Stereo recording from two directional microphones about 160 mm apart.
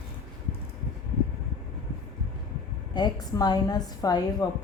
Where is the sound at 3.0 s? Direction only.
25° left (ahead or behind).